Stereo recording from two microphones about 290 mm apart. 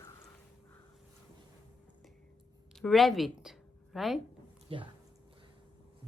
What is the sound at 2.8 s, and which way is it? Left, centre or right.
Speech, centre.